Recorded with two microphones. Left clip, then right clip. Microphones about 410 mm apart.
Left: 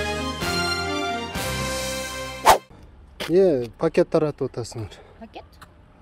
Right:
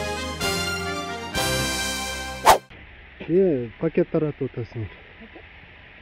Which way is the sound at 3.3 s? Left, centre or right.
Centre.